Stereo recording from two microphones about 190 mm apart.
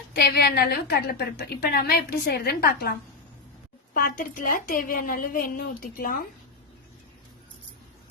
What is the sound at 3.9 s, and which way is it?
A woman's voice, 50° left (ahead or behind).